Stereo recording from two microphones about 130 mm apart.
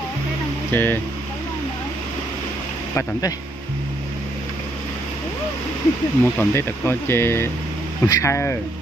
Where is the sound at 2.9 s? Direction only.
25° left (ahead or behind).